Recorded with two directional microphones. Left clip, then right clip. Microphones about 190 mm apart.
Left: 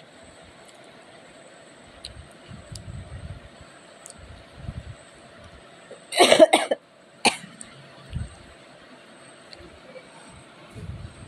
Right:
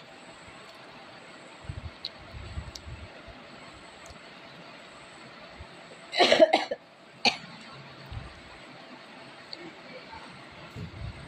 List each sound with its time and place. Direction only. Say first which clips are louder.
6.1 s cough: left 5 dB; 50° left (ahead or behind)